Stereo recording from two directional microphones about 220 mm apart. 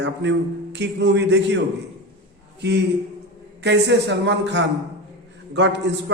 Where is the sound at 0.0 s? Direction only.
55° right (ahead or behind).